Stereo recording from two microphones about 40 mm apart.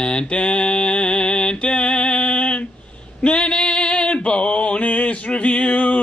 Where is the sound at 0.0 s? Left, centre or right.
Left.